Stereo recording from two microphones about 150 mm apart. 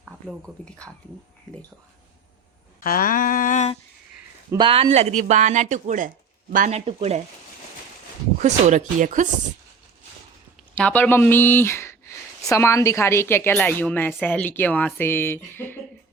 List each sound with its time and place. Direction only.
0.4 s speech: 5° left (ahead or behind)
2.8 s a sound: 70° left (ahead or behind)
4.5 s speech: 35° right (ahead or behind); by 6.1 s 55° right (ahead or behind)
6.7 s speech: 45° right (ahead or behind)
8.4 s speech: 50° right (ahead or behind)
10.8 s speech: 10° left (ahead or behind)